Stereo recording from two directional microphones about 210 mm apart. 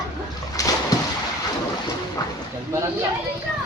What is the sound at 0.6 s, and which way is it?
Splash, 15° left (ahead or behind).